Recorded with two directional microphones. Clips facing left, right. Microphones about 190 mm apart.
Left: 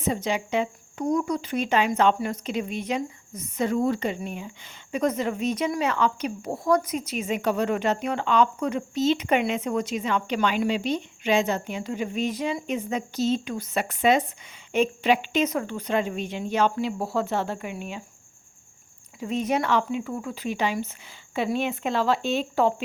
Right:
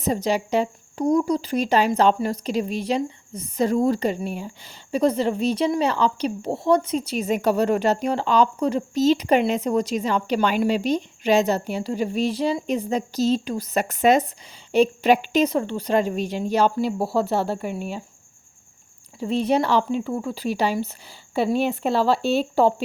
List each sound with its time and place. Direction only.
0.0 s speech: 40° right (ahead or behind)
19.2 s speech: 30° right (ahead or behind)